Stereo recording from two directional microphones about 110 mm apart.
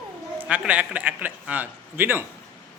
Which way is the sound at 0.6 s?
10° right (ahead or behind).